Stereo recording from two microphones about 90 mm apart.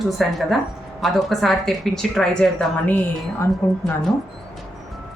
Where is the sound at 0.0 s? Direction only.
Centre (ahead or behind).